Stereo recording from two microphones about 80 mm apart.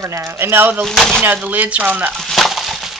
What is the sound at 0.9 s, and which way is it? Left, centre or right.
Speech, centre.